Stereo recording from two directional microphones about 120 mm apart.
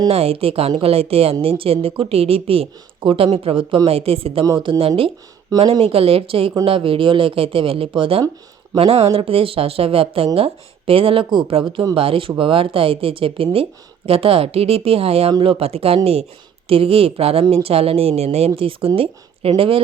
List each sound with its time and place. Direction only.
0.1 s a woman's voice: 55° right (ahead or behind); by 11.9 s 40° right (ahead or behind)
11.9 s a woman's voice: 50° right (ahead or behind)